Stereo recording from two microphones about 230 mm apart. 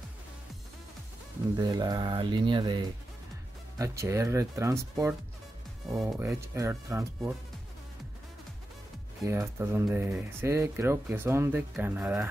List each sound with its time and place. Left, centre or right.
1.6 s speech: centre
9.2 s speech: centre